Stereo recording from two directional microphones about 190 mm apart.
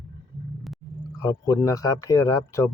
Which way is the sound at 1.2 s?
20° left (ahead or behind).